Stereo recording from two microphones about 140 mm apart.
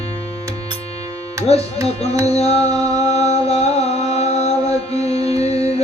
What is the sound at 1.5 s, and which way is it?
Speech, 50° left (ahead or behind).